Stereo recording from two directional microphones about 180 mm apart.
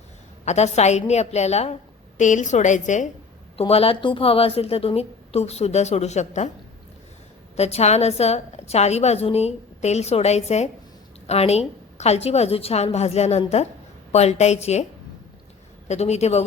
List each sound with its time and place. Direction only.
0.4 s a woman's voice: 40° left (ahead or behind)
7.5 s a woman's voice: 35° left (ahead or behind)
15.9 s a woman's voice: 35° left (ahead or behind)